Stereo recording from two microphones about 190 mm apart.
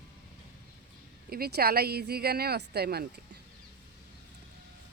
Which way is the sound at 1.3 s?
55° right (ahead or behind).